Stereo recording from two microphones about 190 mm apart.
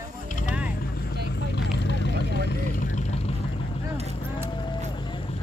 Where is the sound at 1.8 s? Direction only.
65° left (ahead or behind).